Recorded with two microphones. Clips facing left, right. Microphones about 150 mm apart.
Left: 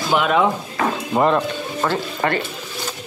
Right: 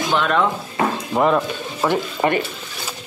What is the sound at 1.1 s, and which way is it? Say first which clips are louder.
Music: even; centre (ahead or behind).